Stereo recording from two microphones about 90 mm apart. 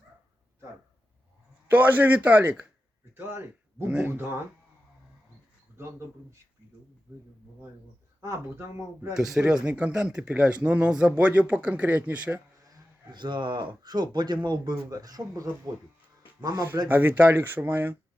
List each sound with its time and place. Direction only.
1.7 s speech: 20° right (ahead or behind)
8.2 s speech: 35° right (ahead or behind)
9.1 s speech: 5° right (ahead or behind)
12.7 s speech: 55° right (ahead or behind)
14.8 s speech: 45° right (ahead or behind)
16.9 s speech: 20° right (ahead or behind)